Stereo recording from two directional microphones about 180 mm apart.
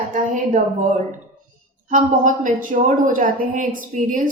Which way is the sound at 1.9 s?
45° right (ahead or behind).